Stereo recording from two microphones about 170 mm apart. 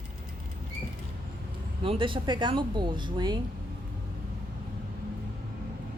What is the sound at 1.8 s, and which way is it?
A woman's voice, 30° right (ahead or behind).